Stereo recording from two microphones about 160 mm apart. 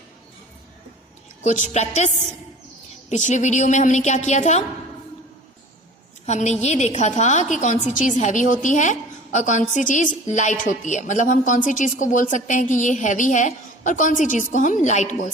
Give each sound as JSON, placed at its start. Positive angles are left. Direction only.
{"t": 1.5, "sound": "a woman's voice", "side_deg": 50}
{"t": 3.1, "sound": "a woman's voice", "side_deg": 45}
{"t": 6.2, "sound": "a woman's voice", "side_deg": 45}